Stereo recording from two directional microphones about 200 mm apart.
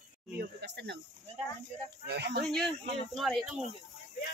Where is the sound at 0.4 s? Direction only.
60° right (ahead or behind).